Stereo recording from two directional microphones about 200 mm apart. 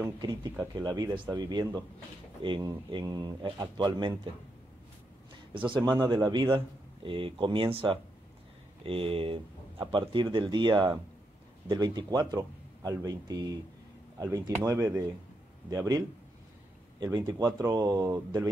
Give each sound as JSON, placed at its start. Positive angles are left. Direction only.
{"t": 0.2, "sound": "a man's voice", "side_deg": -20}
{"t": 5.7, "sound": "a man's voice", "side_deg": -20}
{"t": 17.0, "sound": "a man's voice", "side_deg": -20}